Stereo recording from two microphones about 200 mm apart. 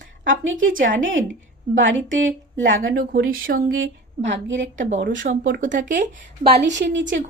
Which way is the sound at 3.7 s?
70° right (ahead or behind).